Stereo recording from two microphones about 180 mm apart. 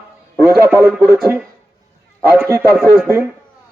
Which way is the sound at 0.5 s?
10° right (ahead or behind).